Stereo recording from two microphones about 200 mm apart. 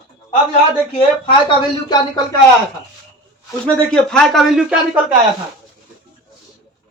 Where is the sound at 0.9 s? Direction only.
25° left (ahead or behind).